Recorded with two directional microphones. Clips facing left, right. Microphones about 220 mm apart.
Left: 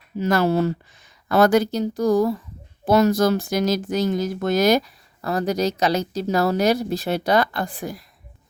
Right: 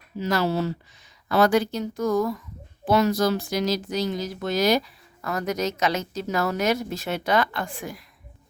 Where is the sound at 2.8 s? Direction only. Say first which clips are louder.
Left 4 dB; 45° left (ahead or behind).